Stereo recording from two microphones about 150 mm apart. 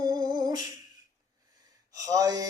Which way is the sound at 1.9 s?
25° right (ahead or behind).